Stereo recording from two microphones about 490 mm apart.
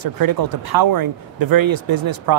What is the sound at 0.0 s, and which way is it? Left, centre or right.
Speech, right.